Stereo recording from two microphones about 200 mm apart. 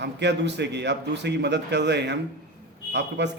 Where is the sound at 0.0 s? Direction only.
60° right (ahead or behind).